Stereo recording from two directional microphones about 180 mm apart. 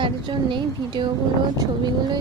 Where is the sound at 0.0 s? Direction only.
25° right (ahead or behind).